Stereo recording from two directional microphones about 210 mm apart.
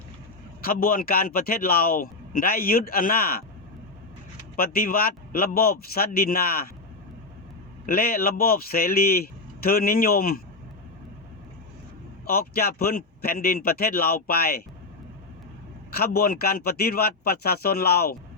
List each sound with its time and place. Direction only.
0.6 s a man's voice: 45° left (ahead or behind)
4.5 s a man's voice: 45° left (ahead or behind)
7.9 s a man's voice: 45° left (ahead or behind)
12.2 s a man's voice: 45° left (ahead or behind)
16.0 s a man's voice: 45° left (ahead or behind)